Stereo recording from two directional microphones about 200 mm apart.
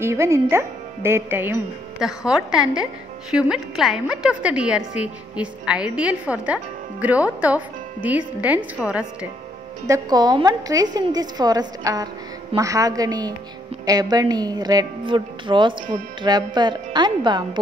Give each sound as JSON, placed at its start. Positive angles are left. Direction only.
{"t": 0.0, "sound": "a woman's voice", "side_deg": -15}
{"t": 9.8, "sound": "a woman's voice", "side_deg": -20}